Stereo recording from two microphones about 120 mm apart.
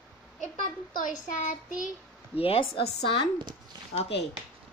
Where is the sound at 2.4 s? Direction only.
50° left (ahead or behind).